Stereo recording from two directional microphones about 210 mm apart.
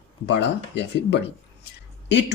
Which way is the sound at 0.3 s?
55° left (ahead or behind).